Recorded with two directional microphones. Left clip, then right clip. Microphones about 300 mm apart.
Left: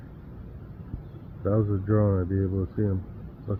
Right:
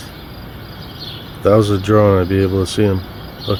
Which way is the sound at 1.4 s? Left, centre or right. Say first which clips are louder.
Right 15 dB; centre.